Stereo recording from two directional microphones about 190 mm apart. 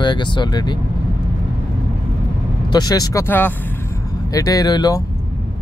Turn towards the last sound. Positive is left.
turn(degrees=20)  # may be behind; listen again after turning